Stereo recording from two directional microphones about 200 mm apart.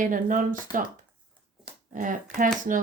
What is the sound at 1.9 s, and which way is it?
Speech, 40° right (ahead or behind).